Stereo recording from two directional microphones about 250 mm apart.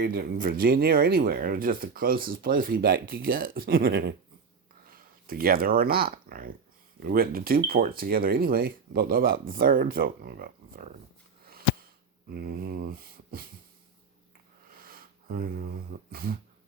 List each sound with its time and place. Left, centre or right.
0.0 s speech: right
12.3 s speech: right
14.7 s a sound: right